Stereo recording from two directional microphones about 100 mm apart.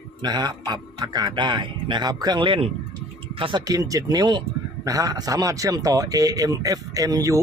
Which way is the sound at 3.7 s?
35° right (ahead or behind).